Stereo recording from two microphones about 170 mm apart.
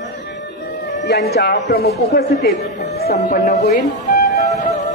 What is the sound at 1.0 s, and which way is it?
A man's voice, 75° left (ahead or behind).